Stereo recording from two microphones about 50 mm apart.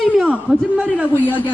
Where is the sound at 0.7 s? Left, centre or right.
Right.